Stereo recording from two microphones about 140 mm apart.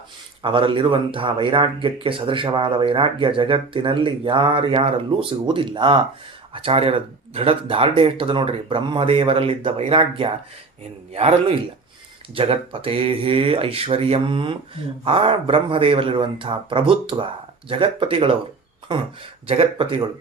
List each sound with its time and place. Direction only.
0.4 s a man's voice: 35° right (ahead or behind)
19.5 s speech: 40° right (ahead or behind)